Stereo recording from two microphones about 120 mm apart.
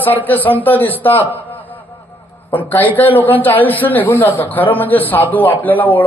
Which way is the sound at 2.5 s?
15° left (ahead or behind).